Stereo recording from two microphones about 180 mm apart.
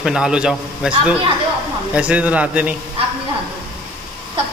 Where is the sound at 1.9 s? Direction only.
5° right (ahead or behind).